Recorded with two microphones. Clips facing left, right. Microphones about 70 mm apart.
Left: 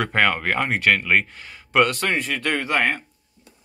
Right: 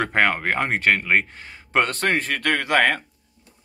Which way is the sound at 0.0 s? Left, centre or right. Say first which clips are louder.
Even; right.